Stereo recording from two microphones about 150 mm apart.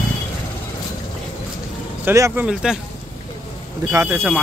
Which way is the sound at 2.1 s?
15° right (ahead or behind).